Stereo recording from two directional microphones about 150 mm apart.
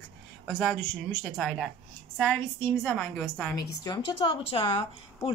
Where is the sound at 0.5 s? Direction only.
15° left (ahead or behind).